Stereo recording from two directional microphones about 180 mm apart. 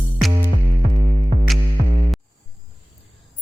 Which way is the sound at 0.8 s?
45° right (ahead or behind).